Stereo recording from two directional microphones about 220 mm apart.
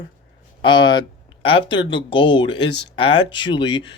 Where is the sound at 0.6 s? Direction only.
20° left (ahead or behind).